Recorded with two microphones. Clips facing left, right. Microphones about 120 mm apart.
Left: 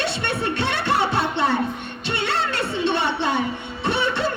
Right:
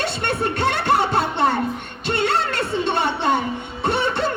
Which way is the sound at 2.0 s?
50° right (ahead or behind).